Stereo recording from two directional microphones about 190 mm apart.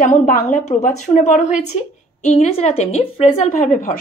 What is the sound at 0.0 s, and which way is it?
Speech, 40° left (ahead or behind).